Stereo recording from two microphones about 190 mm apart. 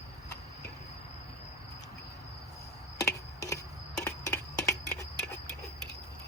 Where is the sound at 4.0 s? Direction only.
15° left (ahead or behind).